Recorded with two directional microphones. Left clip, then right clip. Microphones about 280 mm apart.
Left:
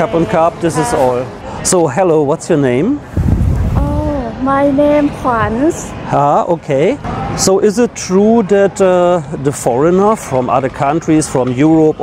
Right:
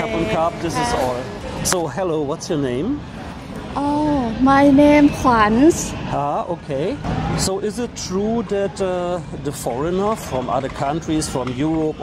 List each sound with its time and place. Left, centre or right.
0.0 s speech: left
1.7 s speech: left
4.5 s a woman's voice: right
6.1 s speech: left
7.4 s speech: left